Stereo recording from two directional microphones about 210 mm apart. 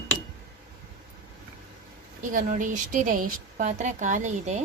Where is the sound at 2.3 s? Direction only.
40° right (ahead or behind).